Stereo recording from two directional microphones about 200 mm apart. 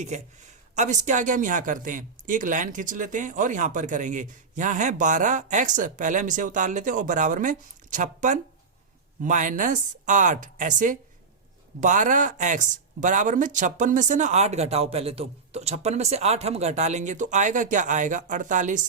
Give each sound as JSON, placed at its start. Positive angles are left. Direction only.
{"t": 0.0, "sound": "speech", "side_deg": -35}